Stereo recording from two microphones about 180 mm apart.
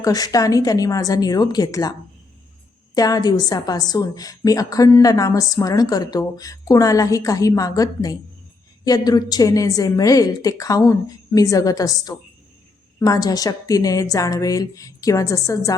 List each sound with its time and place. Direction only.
0.0 s a woman's voice: 20° left (ahead or behind)
2.9 s a woman's voice: 20° left (ahead or behind)